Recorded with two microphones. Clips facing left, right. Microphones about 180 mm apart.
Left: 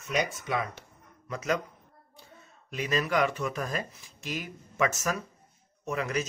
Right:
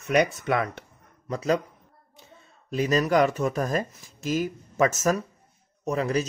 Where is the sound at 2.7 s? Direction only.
40° right (ahead or behind).